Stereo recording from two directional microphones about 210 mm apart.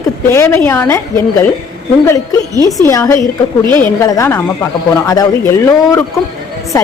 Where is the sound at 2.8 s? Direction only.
15° left (ahead or behind).